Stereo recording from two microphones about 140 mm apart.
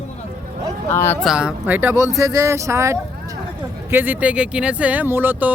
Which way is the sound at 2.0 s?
25° right (ahead or behind).